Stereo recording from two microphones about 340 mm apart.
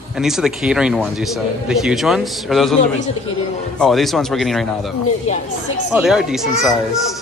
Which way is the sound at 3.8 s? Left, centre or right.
Centre.